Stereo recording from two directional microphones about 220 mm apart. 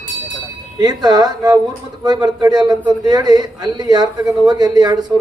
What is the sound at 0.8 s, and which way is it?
A man's voice, 15° right (ahead or behind).